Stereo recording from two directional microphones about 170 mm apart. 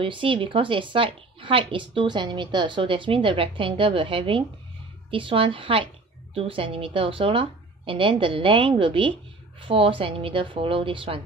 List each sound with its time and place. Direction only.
0.0 s a woman's voice: 30° right (ahead or behind)